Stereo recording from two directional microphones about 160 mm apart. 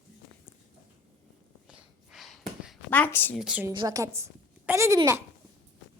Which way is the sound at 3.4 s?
5° right (ahead or behind).